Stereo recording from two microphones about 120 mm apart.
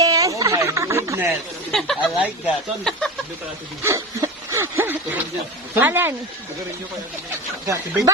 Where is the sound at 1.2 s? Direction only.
Centre (ahead or behind).